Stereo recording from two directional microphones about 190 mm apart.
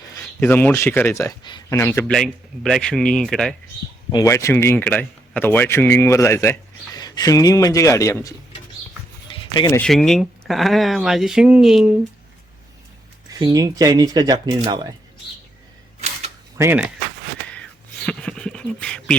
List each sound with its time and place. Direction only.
0.1 s speech: 10° left (ahead or behind)
2.1 s speech: centre (ahead or behind)
4.1 s speech: 15° left (ahead or behind)
9.6 s speech: 20° left (ahead or behind)
9.8 s speech: 5° left (ahead or behind)
13.4 s speech: 20° right (ahead or behind)
16.6 s speech: 10° right (ahead or behind)
18.0 s beatboxing: 5° left (ahead or behind)